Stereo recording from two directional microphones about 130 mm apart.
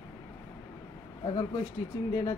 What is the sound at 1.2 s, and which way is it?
Speech, 30° left (ahead or behind).